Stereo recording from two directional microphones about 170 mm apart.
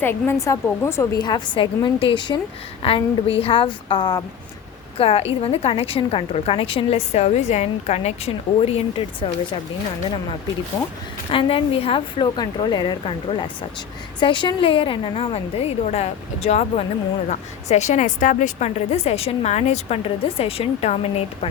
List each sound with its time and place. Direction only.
0.0 s a woman's voice: 15° left (ahead or behind); by 9.3 s 35° left (ahead or behind)
11.3 s a woman's voice: 35° left (ahead or behind)